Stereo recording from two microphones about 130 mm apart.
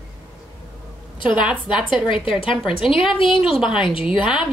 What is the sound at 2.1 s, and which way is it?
Speech, 40° left (ahead or behind).